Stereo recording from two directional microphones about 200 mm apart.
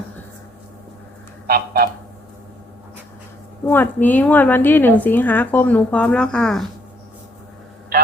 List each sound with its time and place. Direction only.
1.5 s honk: 50° right (ahead or behind)
3.7 s a woman's voice: 10° left (ahead or behind)
7.9 s a sound: 50° right (ahead or behind)